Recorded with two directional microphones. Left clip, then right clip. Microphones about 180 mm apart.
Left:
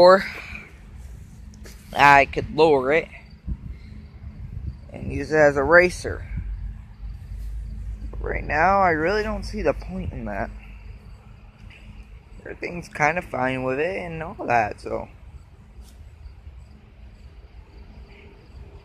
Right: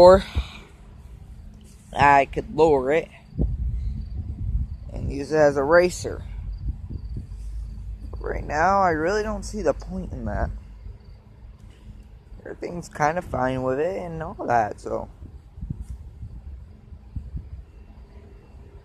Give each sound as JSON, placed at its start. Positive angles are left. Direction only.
{"t": 0.0, "sound": "speech", "side_deg": -25}
{"t": 0.3, "sound": "a sound", "side_deg": -10}
{"t": 1.9, "sound": "speech", "side_deg": 0}
{"t": 4.9, "sound": "speech", "side_deg": 0}
{"t": 8.1, "sound": "speech", "side_deg": 0}
{"t": 10.1, "sound": "speech", "side_deg": 10}
{"t": 12.5, "sound": "speech", "side_deg": -10}
{"t": 14.2, "sound": "speech", "side_deg": 5}
{"t": 14.5, "sound": "speech", "side_deg": -10}